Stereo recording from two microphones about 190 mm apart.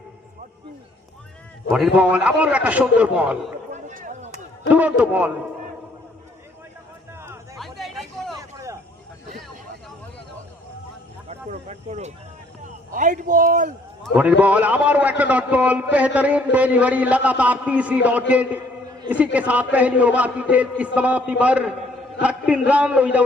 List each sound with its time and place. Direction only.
2.0 s a man's voice: 5° right (ahead or behind)
3.7 s chop: 40° right (ahead or behind)
4.7 s a man's voice: 10° right (ahead or behind)
7.6 s hubbub: centre (ahead or behind)
8.4 s vehicle: 15° right (ahead or behind)
11.3 s a sound: 35° right (ahead or behind)
12.6 s a man's voice: 40° right (ahead or behind)
14.2 s a man's voice: 10° right (ahead or behind)